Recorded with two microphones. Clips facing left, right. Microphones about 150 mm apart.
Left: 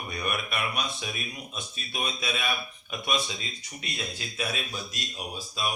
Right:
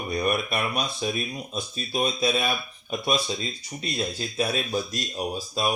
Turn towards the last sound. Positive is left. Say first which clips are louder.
# right 6 dB
turn(degrees=-40)  # may be behind; listen again after turning